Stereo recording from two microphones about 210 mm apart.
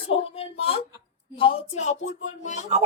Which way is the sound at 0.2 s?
25° left (ahead or behind).